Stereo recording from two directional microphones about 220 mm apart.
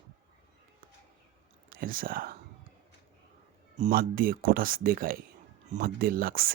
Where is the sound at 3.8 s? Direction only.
40° right (ahead or behind).